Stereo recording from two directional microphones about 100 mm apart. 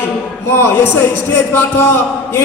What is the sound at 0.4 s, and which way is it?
A man's voice, 20° left (ahead or behind).